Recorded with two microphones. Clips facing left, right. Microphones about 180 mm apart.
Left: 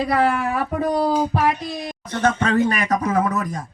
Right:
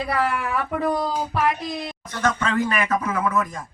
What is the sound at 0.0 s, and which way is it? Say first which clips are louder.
Speech: left 5 dB; 35° left (ahead or behind).